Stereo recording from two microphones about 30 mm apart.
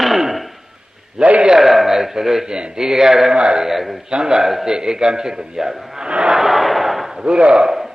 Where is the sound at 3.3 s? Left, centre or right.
Right.